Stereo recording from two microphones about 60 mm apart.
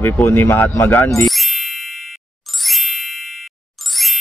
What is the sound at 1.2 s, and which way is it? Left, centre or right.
Ding, centre.